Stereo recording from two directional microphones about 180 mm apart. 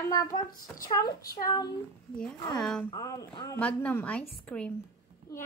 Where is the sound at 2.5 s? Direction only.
5° left (ahead or behind).